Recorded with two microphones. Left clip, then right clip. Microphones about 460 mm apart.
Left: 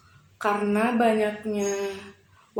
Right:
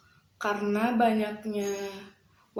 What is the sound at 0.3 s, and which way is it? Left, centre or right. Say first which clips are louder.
A woman's voice: left 5 dB; right.